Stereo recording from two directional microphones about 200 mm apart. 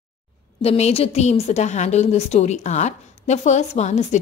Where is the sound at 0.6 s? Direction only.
30° left (ahead or behind).